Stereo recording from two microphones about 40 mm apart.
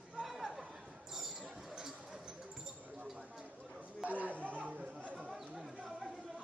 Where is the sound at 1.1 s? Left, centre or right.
Centre.